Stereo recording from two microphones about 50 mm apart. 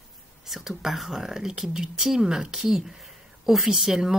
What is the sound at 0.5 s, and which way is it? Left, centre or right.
Speech, centre.